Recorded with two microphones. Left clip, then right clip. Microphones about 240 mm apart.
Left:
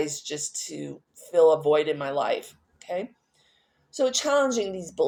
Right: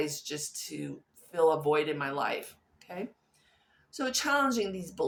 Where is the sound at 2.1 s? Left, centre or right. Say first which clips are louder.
Left 6 dB; right.